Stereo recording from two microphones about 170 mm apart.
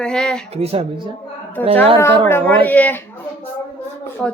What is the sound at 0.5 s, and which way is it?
Speech, 35° right (ahead or behind).